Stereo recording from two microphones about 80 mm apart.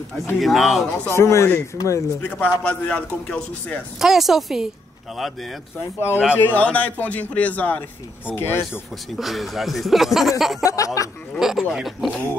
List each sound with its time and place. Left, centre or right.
0.4 s speech: centre
1.1 s speech: left
2.2 s a man's voice: left
4.0 s speech: centre
5.8 s a man's voice: left
9.1 s speech: centre
10.6 s speech: left
11.3 s a sound: centre
11.7 s speech: centre
12.1 s a man's voice: left